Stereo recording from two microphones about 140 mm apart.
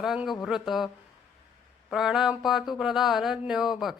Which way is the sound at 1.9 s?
5° right (ahead or behind).